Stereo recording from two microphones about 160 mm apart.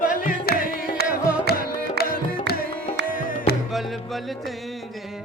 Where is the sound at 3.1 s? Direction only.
60° left (ahead or behind).